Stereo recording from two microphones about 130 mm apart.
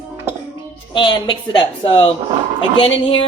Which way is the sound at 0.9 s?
35° left (ahead or behind).